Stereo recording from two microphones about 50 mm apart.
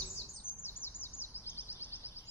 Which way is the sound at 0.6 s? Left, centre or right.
Left.